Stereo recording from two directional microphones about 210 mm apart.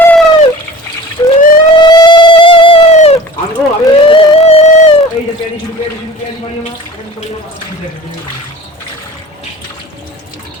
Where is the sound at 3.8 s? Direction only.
20° left (ahead or behind).